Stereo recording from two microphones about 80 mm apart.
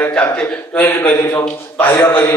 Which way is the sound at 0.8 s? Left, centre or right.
Left.